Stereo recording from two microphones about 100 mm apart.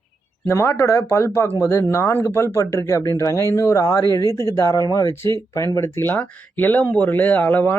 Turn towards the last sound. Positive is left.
turn(degrees=20)  # may be behind; listen again after turning